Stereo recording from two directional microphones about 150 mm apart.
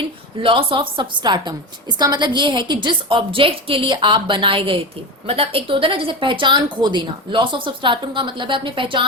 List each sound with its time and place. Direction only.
0.4 s a woman's voice: 35° right (ahead or behind)